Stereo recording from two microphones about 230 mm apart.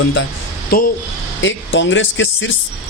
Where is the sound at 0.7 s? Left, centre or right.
Left.